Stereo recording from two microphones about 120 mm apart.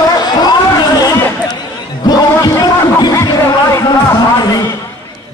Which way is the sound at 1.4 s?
35° left (ahead or behind).